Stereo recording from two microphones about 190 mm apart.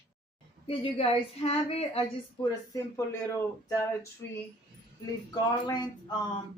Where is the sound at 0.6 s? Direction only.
30° left (ahead or behind).